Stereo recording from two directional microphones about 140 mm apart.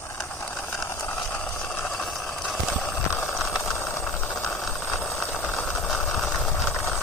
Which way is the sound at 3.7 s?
20° left (ahead or behind).